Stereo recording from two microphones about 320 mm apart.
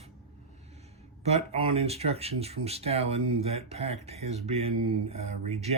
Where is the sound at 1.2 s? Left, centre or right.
Centre.